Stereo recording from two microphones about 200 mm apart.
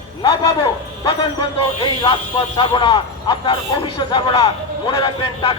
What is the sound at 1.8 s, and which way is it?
Speech, 25° left (ahead or behind).